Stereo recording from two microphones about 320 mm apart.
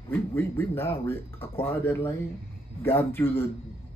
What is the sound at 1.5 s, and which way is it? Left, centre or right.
Speech, centre.